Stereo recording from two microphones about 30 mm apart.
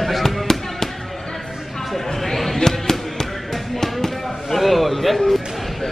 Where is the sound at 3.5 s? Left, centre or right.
Centre.